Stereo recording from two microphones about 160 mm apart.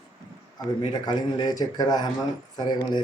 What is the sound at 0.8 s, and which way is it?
Speech, 30° left (ahead or behind).